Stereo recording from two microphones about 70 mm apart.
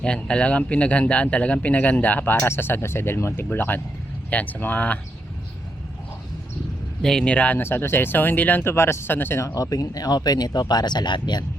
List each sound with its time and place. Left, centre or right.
0.0 s speech: centre
7.0 s speech: centre
7.6 s speech: left
8.6 s speech: left
9.6 s speech: left